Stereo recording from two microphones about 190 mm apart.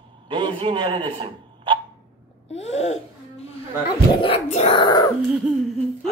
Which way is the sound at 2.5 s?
35° left (ahead or behind).